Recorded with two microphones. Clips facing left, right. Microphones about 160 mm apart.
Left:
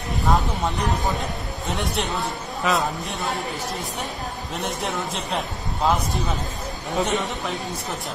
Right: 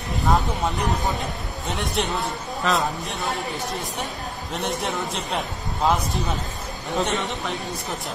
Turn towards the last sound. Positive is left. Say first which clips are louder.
# even
turn(degrees=0)  # may be behind; listen again after turning